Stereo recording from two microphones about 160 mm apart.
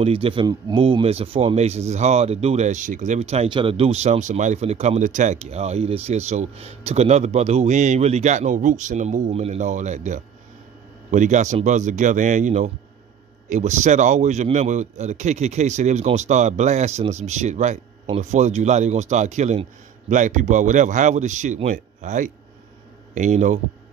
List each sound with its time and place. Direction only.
0.0 s speech: 35° right (ahead or behind)